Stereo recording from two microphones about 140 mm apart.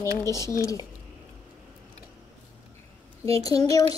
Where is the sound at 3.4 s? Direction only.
25° left (ahead or behind).